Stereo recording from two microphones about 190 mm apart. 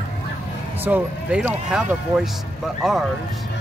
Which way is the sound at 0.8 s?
10° right (ahead or behind).